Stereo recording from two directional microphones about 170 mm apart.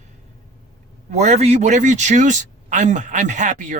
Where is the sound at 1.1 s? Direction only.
40° right (ahead or behind).